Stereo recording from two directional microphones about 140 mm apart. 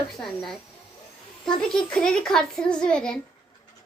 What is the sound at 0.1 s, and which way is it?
Speech, 5° left (ahead or behind).